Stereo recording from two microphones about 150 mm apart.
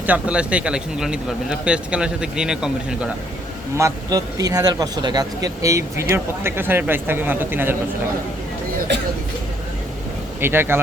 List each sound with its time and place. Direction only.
0.0 s a man's voice: 10° right (ahead or behind)
3.8 s speech: 20° right (ahead or behind)
10.4 s speech: 15° right (ahead or behind)